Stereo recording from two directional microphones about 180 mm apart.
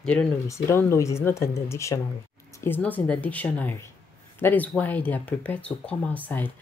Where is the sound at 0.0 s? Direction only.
5° left (ahead or behind).